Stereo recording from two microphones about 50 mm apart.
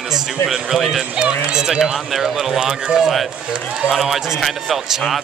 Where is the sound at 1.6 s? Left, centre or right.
Centre.